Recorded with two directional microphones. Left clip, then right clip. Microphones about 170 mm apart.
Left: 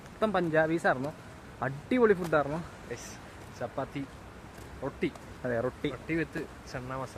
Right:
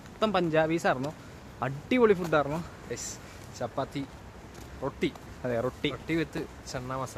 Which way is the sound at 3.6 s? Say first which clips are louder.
Right 3 dB; 30° right (ahead or behind).